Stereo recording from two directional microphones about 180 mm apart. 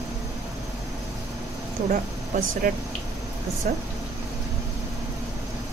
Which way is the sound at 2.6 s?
50° right (ahead or behind).